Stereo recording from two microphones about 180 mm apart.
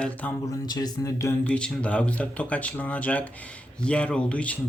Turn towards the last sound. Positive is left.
turn(degrees=5)  # may be behind; listen again after turning